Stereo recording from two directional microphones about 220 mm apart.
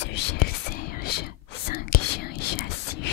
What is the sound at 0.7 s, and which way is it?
Whispering, 40° left (ahead or behind).